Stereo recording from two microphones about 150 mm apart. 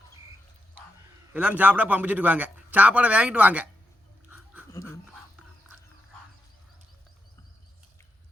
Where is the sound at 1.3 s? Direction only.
10° right (ahead or behind).